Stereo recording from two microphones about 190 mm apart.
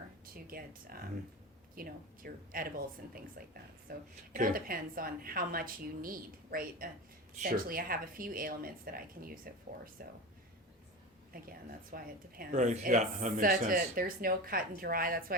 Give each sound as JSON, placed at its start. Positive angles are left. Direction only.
{"t": 0.3, "sound": "speech", "side_deg": -50}
{"t": 11.3, "sound": "speech", "side_deg": -50}